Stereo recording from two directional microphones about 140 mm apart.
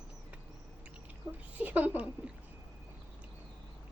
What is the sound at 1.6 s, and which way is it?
Speech, 10° right (ahead or behind).